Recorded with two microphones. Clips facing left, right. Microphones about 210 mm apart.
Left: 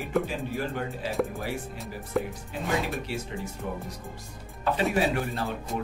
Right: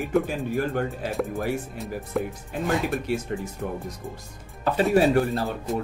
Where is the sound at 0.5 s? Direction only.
50° right (ahead or behind).